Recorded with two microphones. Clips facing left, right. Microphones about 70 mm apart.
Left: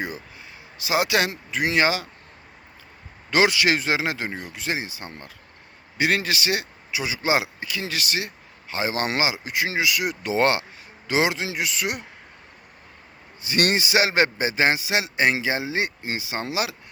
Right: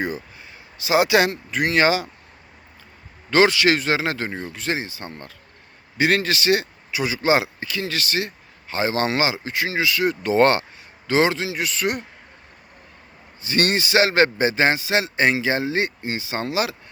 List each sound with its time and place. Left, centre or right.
0.8 s speech: centre
3.2 s speech: centre
13.4 s speech: centre